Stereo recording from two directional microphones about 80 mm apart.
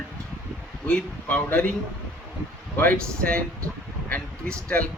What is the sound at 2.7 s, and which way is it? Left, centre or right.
Speech, left.